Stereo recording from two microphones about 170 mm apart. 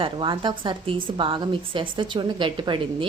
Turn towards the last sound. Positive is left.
turn(degrees=-30)  # may be behind; listen again after turning